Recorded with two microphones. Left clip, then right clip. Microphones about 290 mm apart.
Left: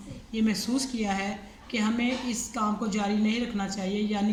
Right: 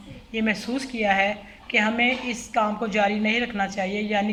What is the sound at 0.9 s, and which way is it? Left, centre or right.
Speech, centre.